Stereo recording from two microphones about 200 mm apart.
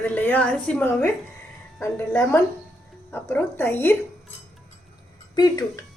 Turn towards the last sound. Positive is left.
turn(degrees=20)  # may be behind; listen again after turning